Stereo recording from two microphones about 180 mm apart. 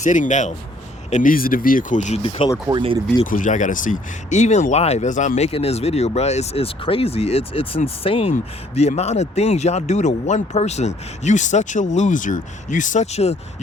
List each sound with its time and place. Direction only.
0.0 s speech: 45° left (ahead or behind)
2.6 s speech: 25° right (ahead or behind)
3.2 s speech: 45° left (ahead or behind)